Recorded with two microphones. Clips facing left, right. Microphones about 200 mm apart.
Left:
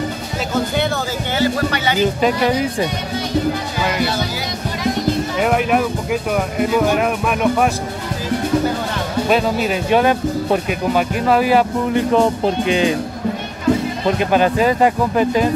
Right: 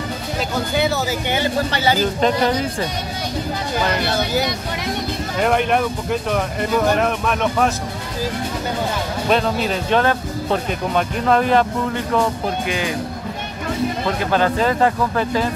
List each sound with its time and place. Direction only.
1.4 s speech: 30° right (ahead or behind)
2.2 s speech: 15° left (ahead or behind)
5.4 s speech: 5° left (ahead or behind)
9.3 s speech: 5° left (ahead or behind)
12.1 s speech: 25° left (ahead or behind)
14.0 s speech: 15° left (ahead or behind)